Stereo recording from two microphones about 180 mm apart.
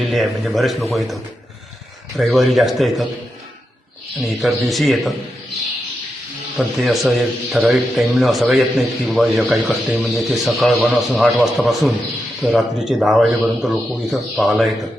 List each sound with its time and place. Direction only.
0.0 s speech: centre (ahead or behind)
4.2 s speech: centre (ahead or behind)
6.6 s speech: centre (ahead or behind)